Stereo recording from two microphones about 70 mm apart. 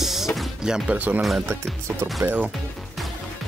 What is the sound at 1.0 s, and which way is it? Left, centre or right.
Speech, right.